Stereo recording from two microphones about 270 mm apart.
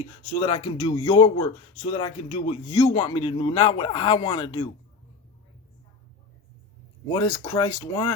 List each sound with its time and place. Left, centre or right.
0.4 s speech: centre
7.1 s speech: centre